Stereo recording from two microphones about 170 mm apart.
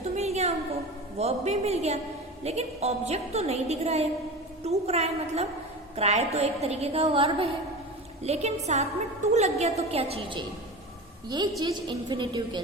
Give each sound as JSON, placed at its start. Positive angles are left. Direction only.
{"t": 0.0, "sound": "a sound", "side_deg": -40}
{"t": 1.2, "sound": "a woman's voice", "side_deg": -40}
{"t": 11.6, "sound": "a woman's voice", "side_deg": -25}